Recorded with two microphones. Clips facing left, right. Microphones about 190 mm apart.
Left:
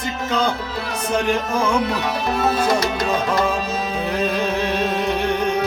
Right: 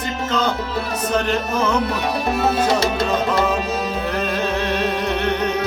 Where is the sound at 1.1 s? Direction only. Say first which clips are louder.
Left 1 dB; 10° left (ahead or behind).